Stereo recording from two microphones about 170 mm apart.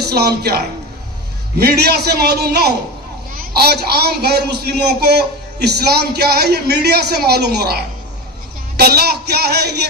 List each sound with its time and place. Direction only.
0.0 s a man's voice: 70° right (ahead or behind)